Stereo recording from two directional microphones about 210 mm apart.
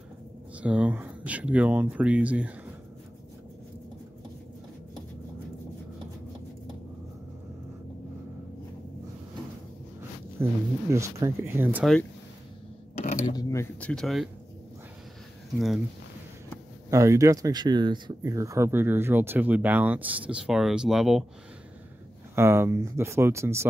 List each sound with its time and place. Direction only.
0.6 s speech: 5° right (ahead or behind)
10.4 s speech: 10° right (ahead or behind)
13.0 s a sound: 40° left (ahead or behind)
13.3 s speech: 15° left (ahead or behind); by 14.3 s centre (ahead or behind)
15.5 s speech: centre (ahead or behind)
16.9 s speech: 15° right (ahead or behind)
22.3 s speech: 10° right (ahead or behind)